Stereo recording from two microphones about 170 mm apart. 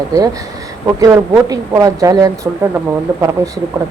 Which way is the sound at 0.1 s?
20° right (ahead or behind).